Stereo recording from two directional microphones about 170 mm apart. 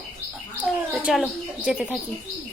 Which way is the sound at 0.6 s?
5° right (ahead or behind).